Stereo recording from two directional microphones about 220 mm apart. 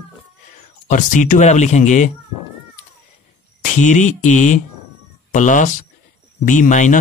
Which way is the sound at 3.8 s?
35° left (ahead or behind).